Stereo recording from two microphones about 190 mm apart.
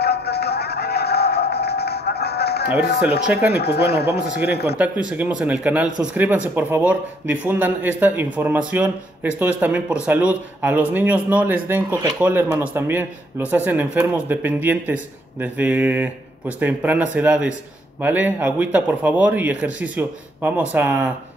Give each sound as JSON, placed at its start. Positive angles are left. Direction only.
{"t": 0.0, "sound": "music", "side_deg": 60}
{"t": 3.4, "sound": "speech", "side_deg": 60}
{"t": 4.7, "sound": "speech", "side_deg": -5}